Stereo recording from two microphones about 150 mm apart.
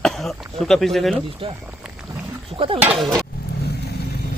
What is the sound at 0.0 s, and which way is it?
Speech, centre (ahead or behind).